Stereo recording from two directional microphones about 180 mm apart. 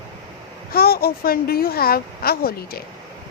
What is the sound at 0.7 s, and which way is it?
A woman's voice, 55° left (ahead or behind).